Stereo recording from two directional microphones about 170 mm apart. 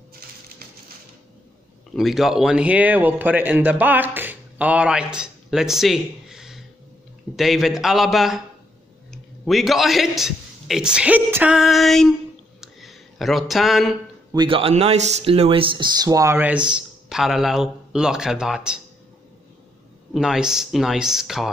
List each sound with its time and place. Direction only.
2.0 s a man's voice: centre (ahead or behind)
11.5 s speech: centre (ahead or behind)
12.5 s a sound: centre (ahead or behind)
14.3 s speech: 30° right (ahead or behind); by 18.8 s 5° right (ahead or behind)
20.1 s speech: centre (ahead or behind)